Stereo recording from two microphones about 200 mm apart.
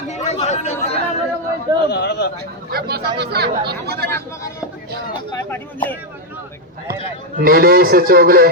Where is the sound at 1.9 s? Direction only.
55° left (ahead or behind).